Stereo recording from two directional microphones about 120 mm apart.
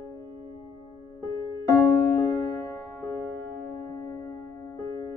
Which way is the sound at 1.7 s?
20° left (ahead or behind).